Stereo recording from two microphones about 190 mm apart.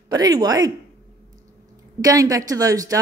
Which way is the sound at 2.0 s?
20° right (ahead or behind).